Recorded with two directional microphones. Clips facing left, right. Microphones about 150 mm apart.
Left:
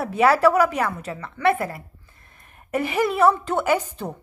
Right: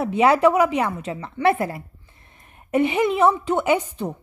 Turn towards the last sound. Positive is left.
turn(degrees=-15)  # may be behind; listen again after turning